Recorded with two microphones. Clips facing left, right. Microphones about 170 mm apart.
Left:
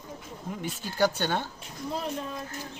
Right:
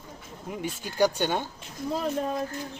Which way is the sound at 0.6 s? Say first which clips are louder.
Right 2 dB; 15° right (ahead or behind).